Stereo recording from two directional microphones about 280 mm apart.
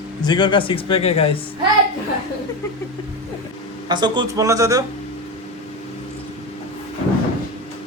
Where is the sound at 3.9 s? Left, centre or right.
Centre.